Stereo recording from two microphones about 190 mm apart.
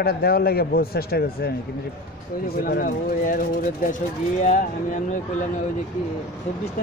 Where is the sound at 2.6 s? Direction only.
50° left (ahead or behind).